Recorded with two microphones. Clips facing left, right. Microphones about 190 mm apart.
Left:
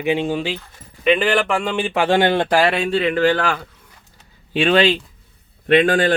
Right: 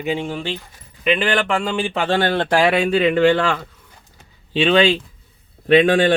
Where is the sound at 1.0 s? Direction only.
5° left (ahead or behind).